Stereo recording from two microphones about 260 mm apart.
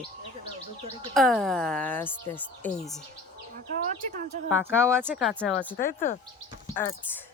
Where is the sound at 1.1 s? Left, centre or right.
Centre.